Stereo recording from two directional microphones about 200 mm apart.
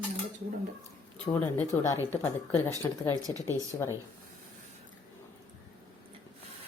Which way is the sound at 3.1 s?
20° right (ahead or behind).